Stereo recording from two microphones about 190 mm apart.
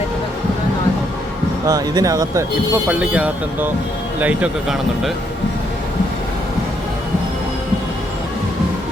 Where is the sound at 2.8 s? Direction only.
5° right (ahead or behind).